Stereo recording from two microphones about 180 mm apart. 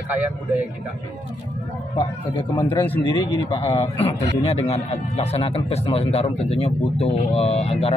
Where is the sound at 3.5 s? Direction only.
35° left (ahead or behind).